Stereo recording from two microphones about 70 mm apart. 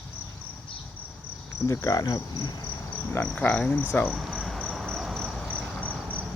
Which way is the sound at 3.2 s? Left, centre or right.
Centre.